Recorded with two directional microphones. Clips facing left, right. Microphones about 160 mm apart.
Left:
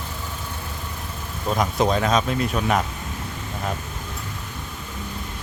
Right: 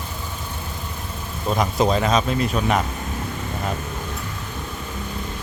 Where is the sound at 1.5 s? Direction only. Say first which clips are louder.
Right 1 dB; centre (ahead or behind).